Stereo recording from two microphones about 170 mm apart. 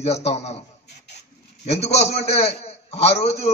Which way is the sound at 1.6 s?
40° left (ahead or behind).